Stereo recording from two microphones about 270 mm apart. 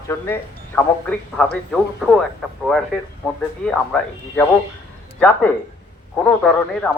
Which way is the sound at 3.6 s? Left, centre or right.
Centre.